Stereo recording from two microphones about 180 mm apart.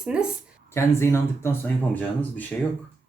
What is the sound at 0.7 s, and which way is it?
Speech, 15° left (ahead or behind).